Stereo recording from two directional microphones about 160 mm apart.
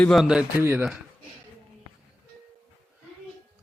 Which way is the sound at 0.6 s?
15° right (ahead or behind).